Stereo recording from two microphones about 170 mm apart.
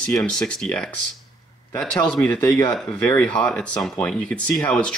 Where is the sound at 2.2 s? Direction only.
10° left (ahead or behind).